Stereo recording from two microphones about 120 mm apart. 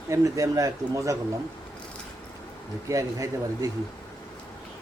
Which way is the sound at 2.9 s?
25° right (ahead or behind).